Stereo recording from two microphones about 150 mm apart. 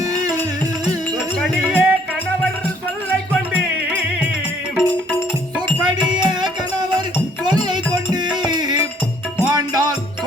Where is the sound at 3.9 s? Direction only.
10° right (ahead or behind).